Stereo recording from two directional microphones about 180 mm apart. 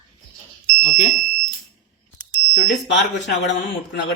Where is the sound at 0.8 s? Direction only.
45° left (ahead or behind).